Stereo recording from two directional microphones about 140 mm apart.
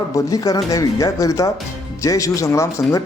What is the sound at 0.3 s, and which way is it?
Speech, 25° left (ahead or behind).